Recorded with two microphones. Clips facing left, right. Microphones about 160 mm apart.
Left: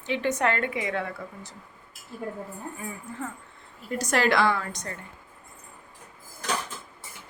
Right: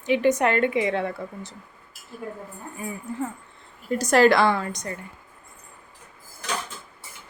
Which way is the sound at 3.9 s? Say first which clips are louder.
Right 7 dB; 35° right (ahead or behind).